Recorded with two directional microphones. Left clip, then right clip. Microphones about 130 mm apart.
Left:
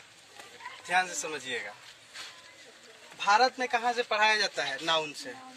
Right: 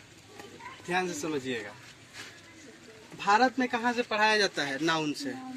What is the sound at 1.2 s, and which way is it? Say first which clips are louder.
Speech: right 2 dB; 15° left (ahead or behind).